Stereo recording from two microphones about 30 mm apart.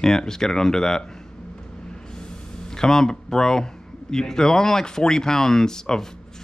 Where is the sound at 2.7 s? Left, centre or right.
Centre.